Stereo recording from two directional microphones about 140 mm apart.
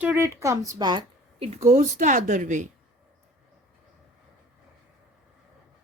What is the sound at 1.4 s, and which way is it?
A woman's voice, 50° right (ahead or behind).